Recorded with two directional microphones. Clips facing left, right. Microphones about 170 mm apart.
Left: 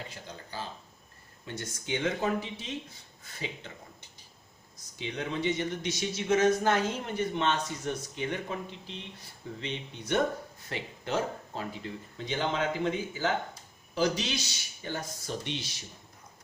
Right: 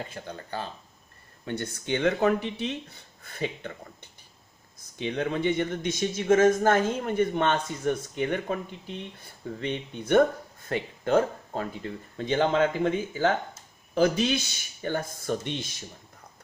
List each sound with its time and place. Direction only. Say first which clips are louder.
0.1 s speech: right 7 dB; 60° right (ahead or behind)